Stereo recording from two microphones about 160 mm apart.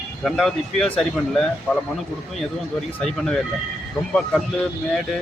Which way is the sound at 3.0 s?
5° left (ahead or behind).